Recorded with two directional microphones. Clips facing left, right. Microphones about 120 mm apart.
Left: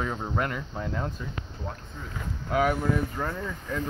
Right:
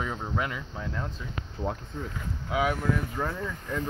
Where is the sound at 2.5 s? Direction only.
5° right (ahead or behind).